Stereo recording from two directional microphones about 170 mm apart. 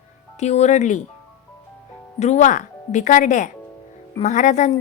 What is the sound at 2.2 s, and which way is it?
A woman's voice, 40° left (ahead or behind).